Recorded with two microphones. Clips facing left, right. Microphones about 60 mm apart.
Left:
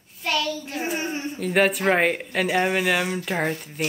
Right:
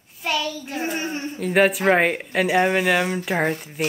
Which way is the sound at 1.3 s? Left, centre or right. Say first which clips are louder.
Right 3 dB; centre.